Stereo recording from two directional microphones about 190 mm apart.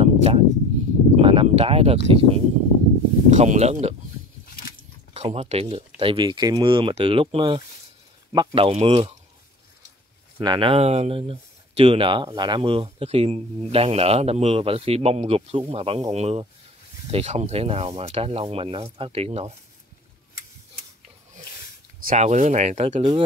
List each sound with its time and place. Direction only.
0.0 s a sound: 30° right (ahead or behind)
1.2 s speech: 30° right (ahead or behind)
5.1 s speech: 35° right (ahead or behind)
8.3 s speech: 15° right (ahead or behind)
8.5 s speech: 30° right (ahead or behind)
10.4 s speech: 25° right (ahead or behind)
22.0 s speech: 40° right (ahead or behind)